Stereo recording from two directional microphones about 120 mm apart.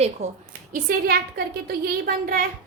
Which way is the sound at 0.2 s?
60° right (ahead or behind).